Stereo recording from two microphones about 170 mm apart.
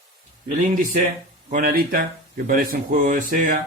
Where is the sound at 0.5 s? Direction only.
50° right (ahead or behind).